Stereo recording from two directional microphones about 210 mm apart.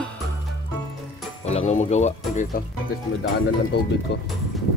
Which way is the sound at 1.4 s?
30° left (ahead or behind).